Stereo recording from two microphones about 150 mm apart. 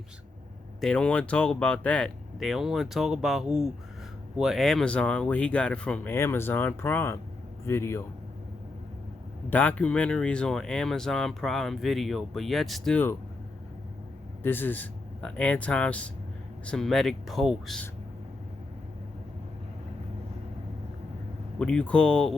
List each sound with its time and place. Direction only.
0.8 s speech: 5° left (ahead or behind)
9.5 s speech: 10° left (ahead or behind)
14.4 s speech: 15° left (ahead or behind)
21.6 s speech: 5° left (ahead or behind)